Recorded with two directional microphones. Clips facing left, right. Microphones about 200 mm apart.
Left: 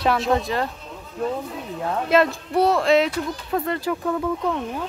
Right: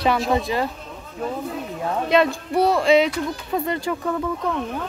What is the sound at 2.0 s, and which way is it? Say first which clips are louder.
Speech: even; centre (ahead or behind).